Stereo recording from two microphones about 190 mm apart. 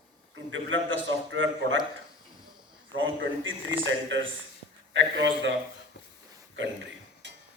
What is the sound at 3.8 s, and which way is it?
A man's voice, 75° right (ahead or behind).